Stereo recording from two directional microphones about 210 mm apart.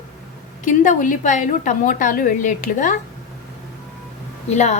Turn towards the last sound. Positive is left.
turn(degrees=30)  # may be behind; listen again after turning